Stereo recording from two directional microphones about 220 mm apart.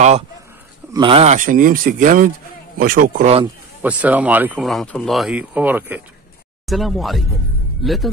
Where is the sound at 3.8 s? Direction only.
5° right (ahead or behind).